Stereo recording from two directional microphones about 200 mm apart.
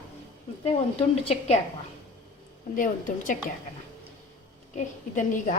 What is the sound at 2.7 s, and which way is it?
Speech, 40° left (ahead or behind).